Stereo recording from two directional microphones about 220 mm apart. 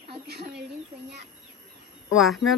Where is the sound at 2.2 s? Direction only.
Centre (ahead or behind).